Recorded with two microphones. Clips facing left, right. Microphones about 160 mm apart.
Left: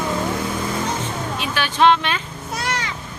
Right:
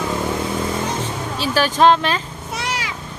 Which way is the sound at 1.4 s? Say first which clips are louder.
Right 3 dB; 40° right (ahead or behind).